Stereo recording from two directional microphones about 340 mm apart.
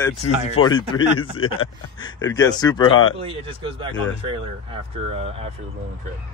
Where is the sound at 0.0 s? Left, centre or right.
Centre.